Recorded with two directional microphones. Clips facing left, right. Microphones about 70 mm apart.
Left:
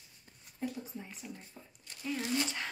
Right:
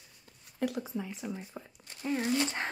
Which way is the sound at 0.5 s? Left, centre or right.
Right.